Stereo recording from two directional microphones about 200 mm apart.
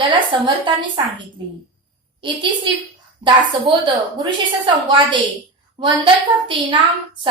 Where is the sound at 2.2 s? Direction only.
25° right (ahead or behind).